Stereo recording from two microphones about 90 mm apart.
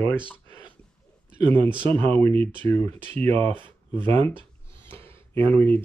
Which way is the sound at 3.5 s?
65° right (ahead or behind).